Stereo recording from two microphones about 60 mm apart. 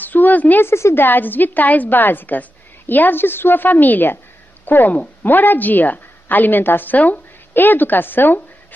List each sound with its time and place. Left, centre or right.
0.0 s a woman's voice: left
0.7 s a woman's voice: left
1.0 s a woman's voice: left